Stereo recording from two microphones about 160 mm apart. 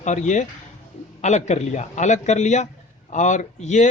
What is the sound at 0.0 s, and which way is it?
A man's voice, 50° left (ahead or behind).